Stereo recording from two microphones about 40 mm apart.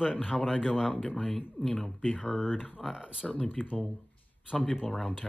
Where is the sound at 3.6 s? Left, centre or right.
Left.